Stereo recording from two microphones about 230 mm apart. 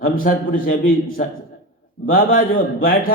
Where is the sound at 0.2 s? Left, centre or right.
Left.